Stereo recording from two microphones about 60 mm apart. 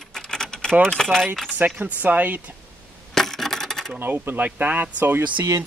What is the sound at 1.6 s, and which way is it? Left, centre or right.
Speech, right.